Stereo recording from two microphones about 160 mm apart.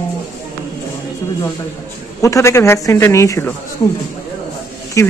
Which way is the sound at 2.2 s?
20° left (ahead or behind).